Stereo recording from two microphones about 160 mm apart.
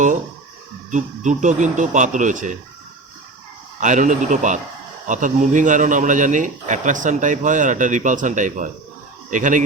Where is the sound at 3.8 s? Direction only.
50° right (ahead or behind).